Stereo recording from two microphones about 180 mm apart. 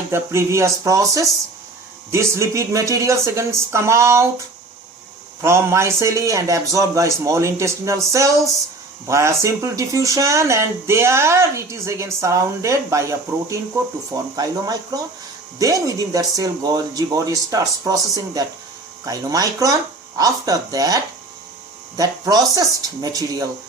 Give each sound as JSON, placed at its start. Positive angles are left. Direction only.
{"t": 0.1, "sound": "speech", "side_deg": -15}
{"t": 5.4, "sound": "speech", "side_deg": -15}